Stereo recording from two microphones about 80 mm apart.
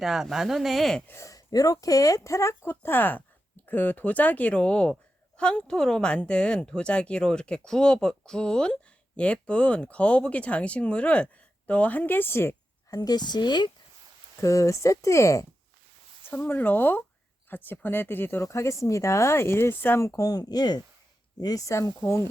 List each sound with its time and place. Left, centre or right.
0.0 s speech: centre
1.0 s speech: left
1.3 s speech: left
13.0 s speech: left
14.4 s speech: left
16.5 s speech: left
20.0 s speech: left
21.4 s speech: left